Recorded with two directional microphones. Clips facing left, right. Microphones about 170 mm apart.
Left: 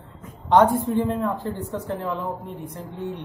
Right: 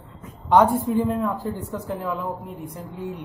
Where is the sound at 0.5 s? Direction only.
5° right (ahead or behind).